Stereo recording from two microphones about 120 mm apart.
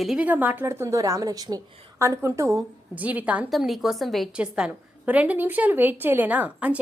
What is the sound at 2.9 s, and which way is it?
Speech, 15° right (ahead or behind).